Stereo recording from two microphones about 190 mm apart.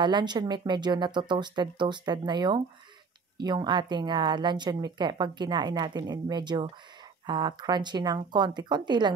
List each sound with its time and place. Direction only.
0.0 s speech: 25° right (ahead or behind)